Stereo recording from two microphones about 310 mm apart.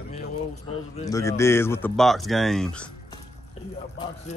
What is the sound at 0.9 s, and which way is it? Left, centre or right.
Speech, centre.